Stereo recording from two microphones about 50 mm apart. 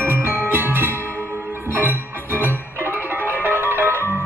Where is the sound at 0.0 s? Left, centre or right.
Right.